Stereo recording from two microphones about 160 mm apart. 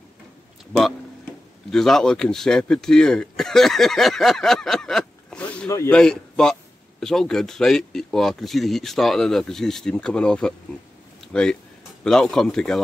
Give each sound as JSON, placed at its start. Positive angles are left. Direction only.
{"t": 1.7, "sound": "speech", "side_deg": 5}